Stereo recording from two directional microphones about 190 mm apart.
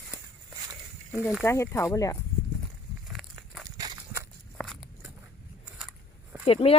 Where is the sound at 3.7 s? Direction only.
20° right (ahead or behind).